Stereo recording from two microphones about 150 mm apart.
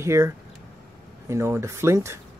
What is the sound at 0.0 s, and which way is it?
Speech, 20° right (ahead or behind).